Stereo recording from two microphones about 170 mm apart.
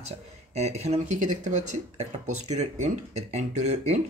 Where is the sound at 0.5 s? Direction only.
40° right (ahead or behind).